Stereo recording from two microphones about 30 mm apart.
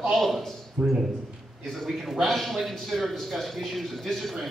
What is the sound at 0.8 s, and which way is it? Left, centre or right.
Speech, right.